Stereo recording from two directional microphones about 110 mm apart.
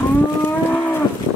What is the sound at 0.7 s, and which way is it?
Livestock, 15° left (ahead or behind).